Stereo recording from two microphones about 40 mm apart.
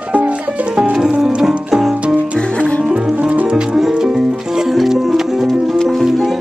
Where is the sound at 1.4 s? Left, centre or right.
Centre.